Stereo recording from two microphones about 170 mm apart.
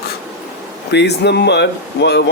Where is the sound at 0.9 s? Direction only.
85° left.